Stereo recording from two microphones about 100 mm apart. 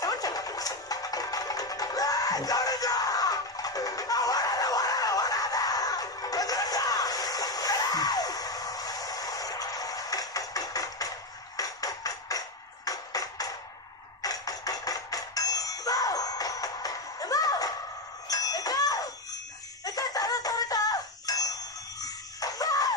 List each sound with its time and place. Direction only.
0.0 s music: 40° left (ahead or behind)
18.3 s a sound: 40° left (ahead or behind)
19.8 s music: 40° left (ahead or behind)